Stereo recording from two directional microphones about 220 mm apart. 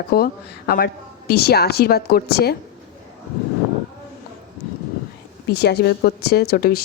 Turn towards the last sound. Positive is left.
turn(degrees=45)  # may be behind; listen again after turning